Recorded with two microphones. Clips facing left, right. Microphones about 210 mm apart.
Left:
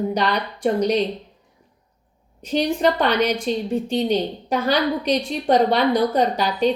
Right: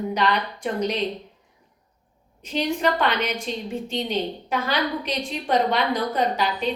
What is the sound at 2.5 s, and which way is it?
A woman's voice, 35° left (ahead or behind).